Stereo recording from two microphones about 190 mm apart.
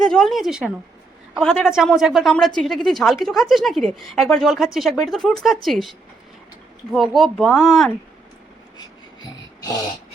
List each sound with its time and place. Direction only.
0.0 s speech: 5° left (ahead or behind)
6.9 s speech: centre (ahead or behind)
8.8 s a sound: 20° left (ahead or behind)